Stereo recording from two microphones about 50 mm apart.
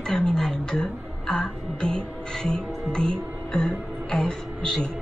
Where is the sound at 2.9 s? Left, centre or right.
Centre.